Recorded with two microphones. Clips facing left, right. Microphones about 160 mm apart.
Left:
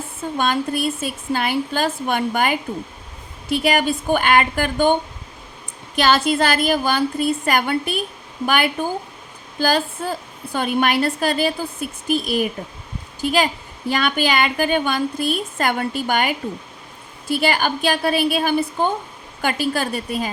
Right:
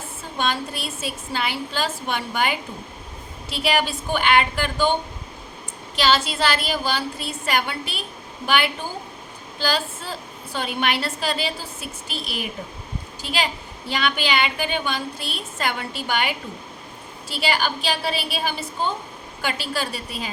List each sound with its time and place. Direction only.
0.3 s a woman's voice: 50° left (ahead or behind)
6.0 s a woman's voice: 55° left (ahead or behind)